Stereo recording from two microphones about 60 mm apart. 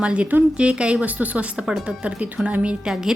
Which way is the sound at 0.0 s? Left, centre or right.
Centre.